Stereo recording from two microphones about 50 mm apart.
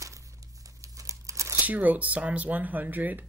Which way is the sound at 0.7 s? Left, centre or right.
Right.